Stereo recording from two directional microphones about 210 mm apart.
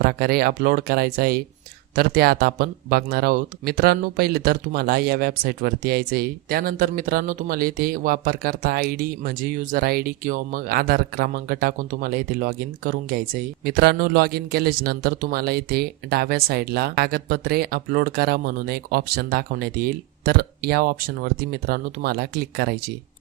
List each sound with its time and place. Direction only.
0.0 s speech: 45° right (ahead or behind)